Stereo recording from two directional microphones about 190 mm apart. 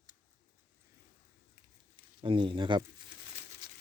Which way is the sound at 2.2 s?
25° right (ahead or behind).